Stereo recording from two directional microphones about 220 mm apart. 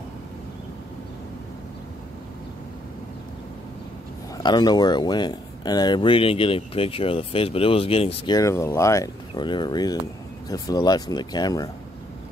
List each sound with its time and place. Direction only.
4.4 s speech: 20° left (ahead or behind)
8.4 s speech: 15° left (ahead or behind)